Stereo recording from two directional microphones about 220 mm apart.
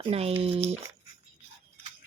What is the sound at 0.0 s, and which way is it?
Speech, 25° right (ahead or behind).